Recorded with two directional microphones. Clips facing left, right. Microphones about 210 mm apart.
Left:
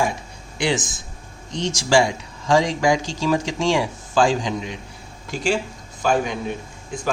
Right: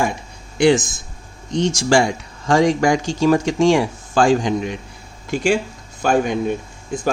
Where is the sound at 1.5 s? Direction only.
50° right (ahead or behind).